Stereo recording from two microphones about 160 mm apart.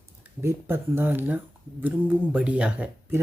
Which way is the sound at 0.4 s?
15° right (ahead or behind).